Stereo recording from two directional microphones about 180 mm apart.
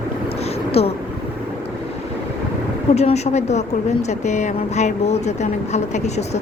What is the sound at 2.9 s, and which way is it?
Speech, 35° left (ahead or behind).